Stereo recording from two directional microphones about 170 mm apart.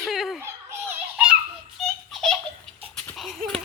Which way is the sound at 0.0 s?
Centre (ahead or behind).